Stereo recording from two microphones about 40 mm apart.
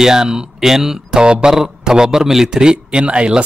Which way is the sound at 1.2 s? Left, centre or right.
Right.